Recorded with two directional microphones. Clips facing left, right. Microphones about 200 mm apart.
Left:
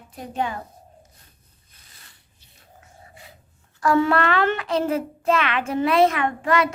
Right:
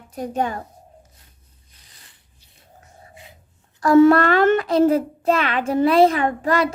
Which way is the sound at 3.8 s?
40° right (ahead or behind).